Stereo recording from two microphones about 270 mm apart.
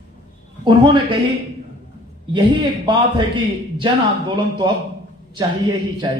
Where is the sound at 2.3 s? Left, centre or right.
Centre.